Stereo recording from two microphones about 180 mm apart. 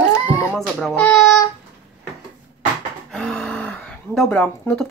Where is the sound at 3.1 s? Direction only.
Centre (ahead or behind).